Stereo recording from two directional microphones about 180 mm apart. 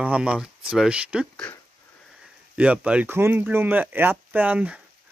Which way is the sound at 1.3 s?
5° left (ahead or behind).